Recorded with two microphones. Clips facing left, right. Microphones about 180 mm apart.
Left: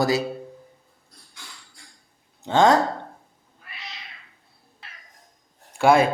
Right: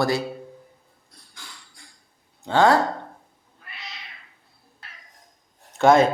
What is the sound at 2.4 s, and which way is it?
Speech, 20° left (ahead or behind).